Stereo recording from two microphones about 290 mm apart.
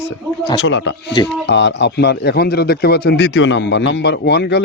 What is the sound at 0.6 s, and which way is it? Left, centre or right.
Speech, left.